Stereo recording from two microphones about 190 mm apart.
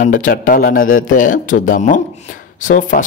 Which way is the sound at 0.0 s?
45° left (ahead or behind).